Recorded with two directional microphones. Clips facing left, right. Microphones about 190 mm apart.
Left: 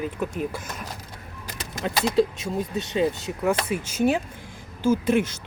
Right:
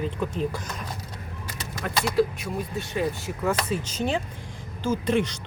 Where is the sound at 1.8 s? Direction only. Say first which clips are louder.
Left 2 dB; 25° left (ahead or behind).